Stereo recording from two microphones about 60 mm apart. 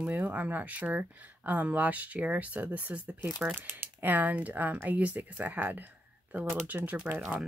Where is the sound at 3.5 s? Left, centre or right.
Right.